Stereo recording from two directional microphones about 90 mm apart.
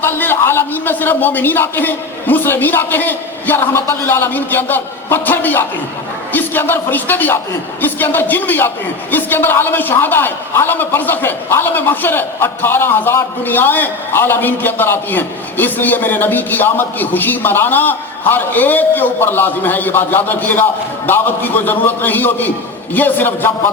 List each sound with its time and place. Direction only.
0.0 s a man's voice: 25° left (ahead or behind)